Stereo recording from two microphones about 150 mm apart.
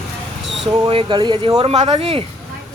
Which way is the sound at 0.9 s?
35° right (ahead or behind).